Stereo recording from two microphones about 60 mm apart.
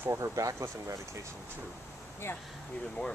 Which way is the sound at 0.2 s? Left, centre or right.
Right.